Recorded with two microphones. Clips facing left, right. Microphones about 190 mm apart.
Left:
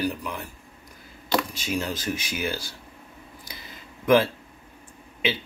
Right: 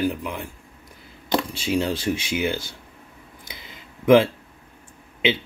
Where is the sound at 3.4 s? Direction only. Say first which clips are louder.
Right 3 dB; 25° right (ahead or behind).